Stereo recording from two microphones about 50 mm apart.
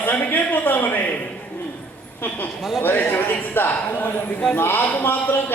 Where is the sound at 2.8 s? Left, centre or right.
Left.